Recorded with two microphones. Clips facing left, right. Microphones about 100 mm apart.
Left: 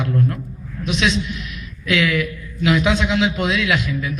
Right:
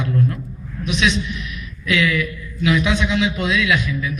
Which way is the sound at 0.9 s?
40° left (ahead or behind).